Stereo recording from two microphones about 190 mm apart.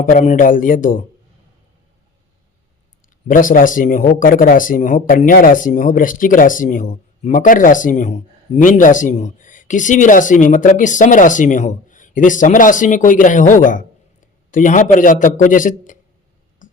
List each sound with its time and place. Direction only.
0.0 s speech: 40° left (ahead or behind)
3.2 s speech: 45° left (ahead or behind)
16.6 s a sound: 45° left (ahead or behind)